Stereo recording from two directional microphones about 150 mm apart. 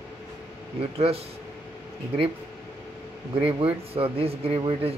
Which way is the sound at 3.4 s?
40° right (ahead or behind).